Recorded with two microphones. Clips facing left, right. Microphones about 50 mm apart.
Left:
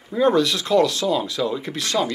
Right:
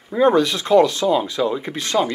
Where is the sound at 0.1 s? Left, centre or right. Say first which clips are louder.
Right 2 dB; right.